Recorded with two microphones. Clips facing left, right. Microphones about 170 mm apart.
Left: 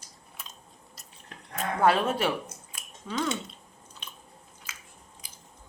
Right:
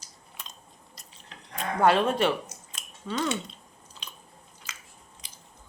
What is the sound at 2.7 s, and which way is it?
Scissors, centre (ahead or behind).